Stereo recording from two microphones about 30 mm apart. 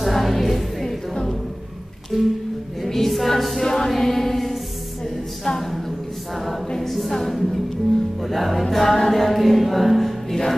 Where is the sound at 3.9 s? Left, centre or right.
Centre.